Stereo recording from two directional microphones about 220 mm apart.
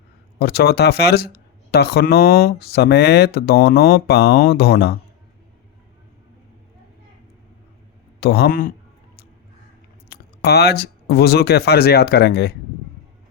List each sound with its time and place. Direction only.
0.3 s speech: 45° left (ahead or behind)
8.2 s speech: 45° left (ahead or behind)
10.1 s speech: 45° left (ahead or behind)